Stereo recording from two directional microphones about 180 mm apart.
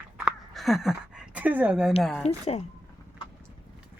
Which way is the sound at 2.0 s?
5° left (ahead or behind).